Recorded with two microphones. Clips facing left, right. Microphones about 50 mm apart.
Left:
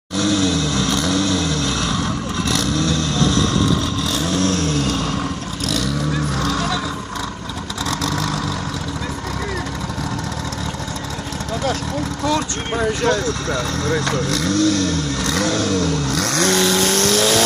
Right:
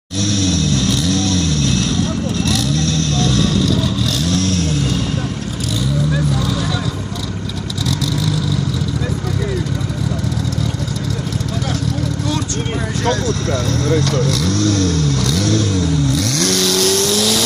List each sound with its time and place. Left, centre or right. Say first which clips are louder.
0.2 s a sound: even; centre
1.1 s vehicle: right 1 dB; centre
4.2 s vehicle: left 1 dB; left
8.0 s vehicle: right 2 dB; left
16.1 s vehicle: right 2 dB; left
16.3 s vehicle: left 4 dB; left